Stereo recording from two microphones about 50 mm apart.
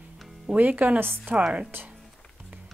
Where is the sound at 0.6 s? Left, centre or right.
Right.